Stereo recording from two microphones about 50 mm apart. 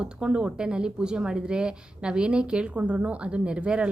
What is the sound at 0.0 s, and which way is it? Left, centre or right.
A woman's voice, centre.